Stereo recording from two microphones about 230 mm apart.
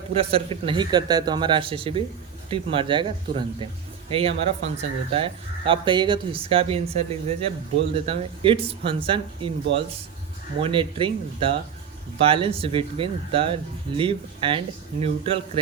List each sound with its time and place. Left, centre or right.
0.1 s speech: right
10.6 s speech: right